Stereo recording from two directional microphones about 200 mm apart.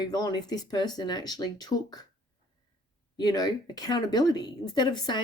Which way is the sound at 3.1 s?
20° left (ahead or behind).